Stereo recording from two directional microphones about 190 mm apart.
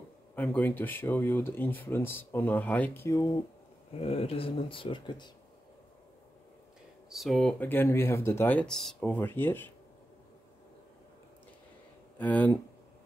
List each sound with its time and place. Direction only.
0.4 s speech: 10° left (ahead or behind)
3.9 s speech: 30° left (ahead or behind)
7.1 s speech: centre (ahead or behind)
12.2 s speech: 10° left (ahead or behind)